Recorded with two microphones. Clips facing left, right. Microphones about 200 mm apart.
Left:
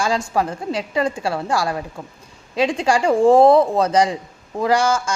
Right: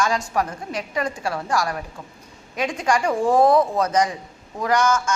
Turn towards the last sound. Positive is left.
turn(degrees=30)  # may be behind; listen again after turning